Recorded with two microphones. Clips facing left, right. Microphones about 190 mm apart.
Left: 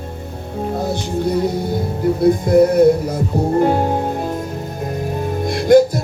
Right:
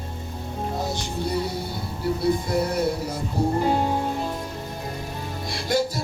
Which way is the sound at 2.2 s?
50° left (ahead or behind).